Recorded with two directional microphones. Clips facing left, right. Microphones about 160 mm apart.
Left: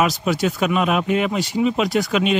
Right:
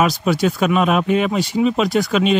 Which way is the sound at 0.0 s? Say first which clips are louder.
Right 2 dB; 40° right (ahead or behind).